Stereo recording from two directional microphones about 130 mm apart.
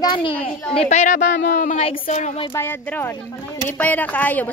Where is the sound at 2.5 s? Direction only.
15° left (ahead or behind).